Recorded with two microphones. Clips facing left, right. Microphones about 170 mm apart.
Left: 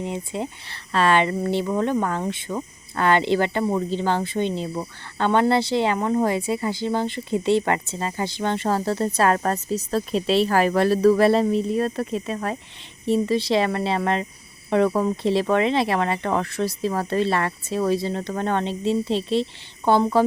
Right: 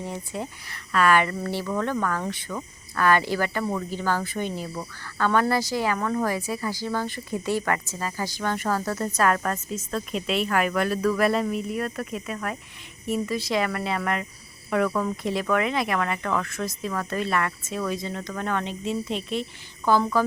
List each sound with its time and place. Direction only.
0.0 s speech: 20° left (ahead or behind)